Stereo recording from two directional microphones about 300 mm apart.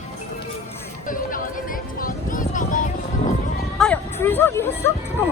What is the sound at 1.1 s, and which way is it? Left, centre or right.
Music, left.